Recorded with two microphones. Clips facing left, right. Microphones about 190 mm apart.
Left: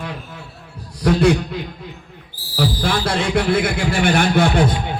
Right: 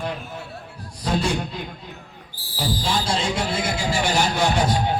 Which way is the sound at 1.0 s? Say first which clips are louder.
Left 8 dB; 60° left (ahead or behind).